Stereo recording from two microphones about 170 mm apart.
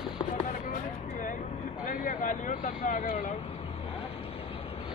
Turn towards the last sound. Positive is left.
turn(degrees=50)  # may be behind; listen again after turning